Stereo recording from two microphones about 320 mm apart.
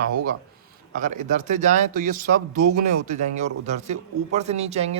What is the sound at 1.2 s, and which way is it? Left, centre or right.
Speech, right.